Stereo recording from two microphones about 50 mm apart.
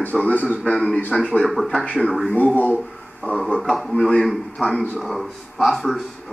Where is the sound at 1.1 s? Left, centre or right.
Centre.